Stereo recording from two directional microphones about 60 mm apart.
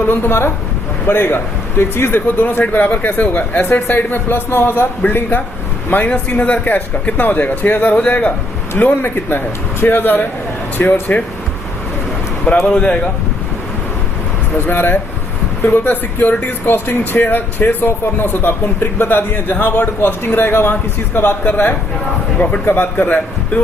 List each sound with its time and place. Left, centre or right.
0.0 s speech: left
12.6 s speech: centre
14.7 s speech: left